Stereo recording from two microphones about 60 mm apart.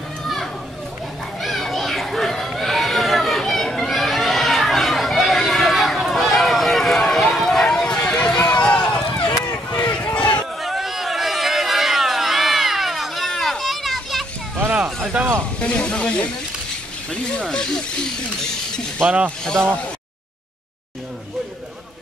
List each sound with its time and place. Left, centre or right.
1.4 s children playing: centre
6.0 s run: centre
9.8 s a sound: left
10.6 s a sound: centre
15.2 s a sound: centre
15.6 s snake: centre
17.1 s speech: centre
19.0 s speech: right
19.4 s speech: centre